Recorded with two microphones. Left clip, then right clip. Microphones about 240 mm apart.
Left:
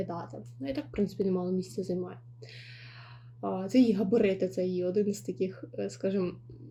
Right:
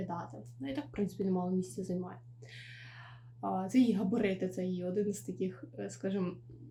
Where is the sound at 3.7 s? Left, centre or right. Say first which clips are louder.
Left 7 dB; centre.